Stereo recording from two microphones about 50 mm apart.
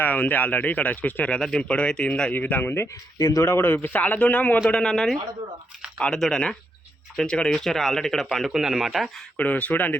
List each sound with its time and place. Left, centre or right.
0.0 s speech: left
1.3 s speech: centre
2.3 s speech: left
2.8 s speech: left
4.7 s speech: centre
6.1 s speech: centre
8.4 s speech: centre
8.8 s speech: centre
9.4 s speech: left